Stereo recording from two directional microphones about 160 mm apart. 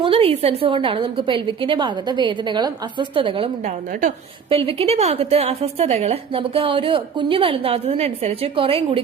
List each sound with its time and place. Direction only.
0.0 s a woman's voice: 35° right (ahead or behind)